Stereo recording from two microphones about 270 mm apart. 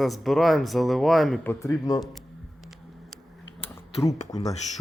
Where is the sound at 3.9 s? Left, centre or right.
Centre.